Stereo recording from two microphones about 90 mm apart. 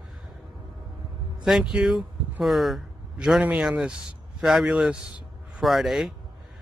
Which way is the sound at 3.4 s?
15° right (ahead or behind).